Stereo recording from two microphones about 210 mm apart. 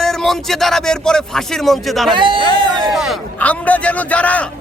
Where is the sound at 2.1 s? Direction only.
25° right (ahead or behind).